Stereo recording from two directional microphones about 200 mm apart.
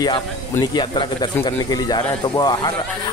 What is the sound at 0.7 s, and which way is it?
Speech, 25° left (ahead or behind).